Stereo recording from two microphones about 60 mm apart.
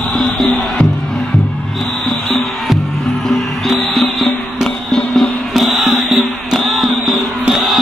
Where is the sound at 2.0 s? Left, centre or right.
Centre.